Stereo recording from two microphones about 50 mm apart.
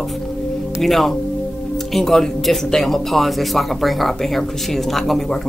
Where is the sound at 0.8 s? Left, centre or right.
Centre.